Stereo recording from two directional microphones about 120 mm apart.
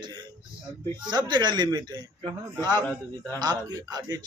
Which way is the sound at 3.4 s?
35° right (ahead or behind).